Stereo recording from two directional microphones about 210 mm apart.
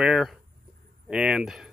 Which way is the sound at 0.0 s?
Centre (ahead or behind).